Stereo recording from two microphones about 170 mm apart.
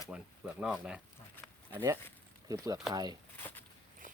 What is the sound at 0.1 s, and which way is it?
Speech, 5° right (ahead or behind).